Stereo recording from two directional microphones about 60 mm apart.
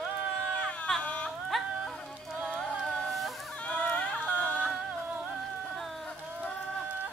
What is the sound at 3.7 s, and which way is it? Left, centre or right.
Music, left.